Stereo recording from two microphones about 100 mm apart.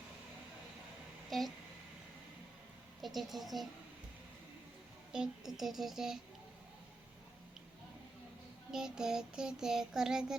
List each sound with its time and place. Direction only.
1.3 s speech: centre (ahead or behind)
3.0 s child singing: centre (ahead or behind)
5.1 s child singing: 5° right (ahead or behind)
8.7 s child singing: 5° right (ahead or behind)